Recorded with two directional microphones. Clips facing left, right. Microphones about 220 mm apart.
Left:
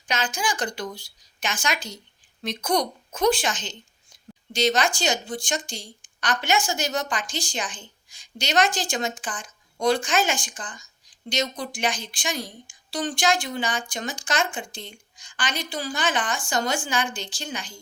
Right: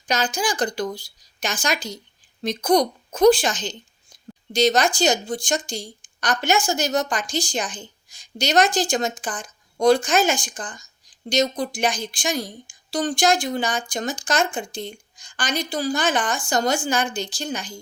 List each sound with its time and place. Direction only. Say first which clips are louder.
0.1 s a woman's voice: right 4 dB; 35° right (ahead or behind)